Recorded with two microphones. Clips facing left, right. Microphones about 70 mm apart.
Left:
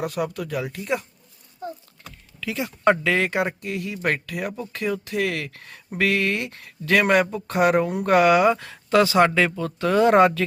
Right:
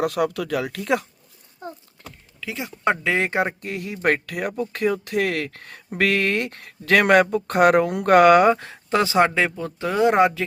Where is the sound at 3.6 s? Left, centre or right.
Right.